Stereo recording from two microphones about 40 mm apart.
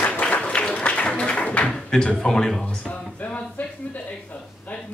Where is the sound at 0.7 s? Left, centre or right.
Left.